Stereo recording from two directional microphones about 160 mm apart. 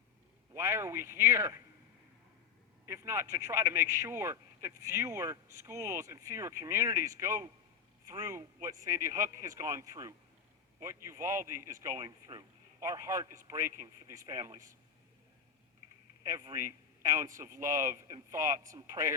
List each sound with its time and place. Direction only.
0.5 s a man's voice: 20° right (ahead or behind)
2.8 s a man's voice: 15° right (ahead or behind)
16.2 s a man's voice: 20° right (ahead or behind)